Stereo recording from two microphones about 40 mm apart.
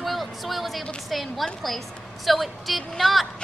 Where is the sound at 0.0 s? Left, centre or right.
Centre.